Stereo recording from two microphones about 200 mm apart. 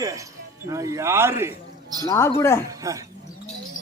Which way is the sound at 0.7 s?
15° right (ahead or behind).